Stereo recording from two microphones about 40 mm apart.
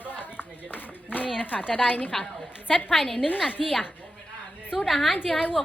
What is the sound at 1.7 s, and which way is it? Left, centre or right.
Speech, left.